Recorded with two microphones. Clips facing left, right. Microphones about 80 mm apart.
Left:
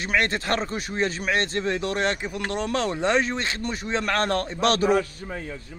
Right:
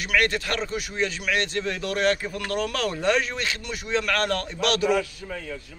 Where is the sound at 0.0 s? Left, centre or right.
Left.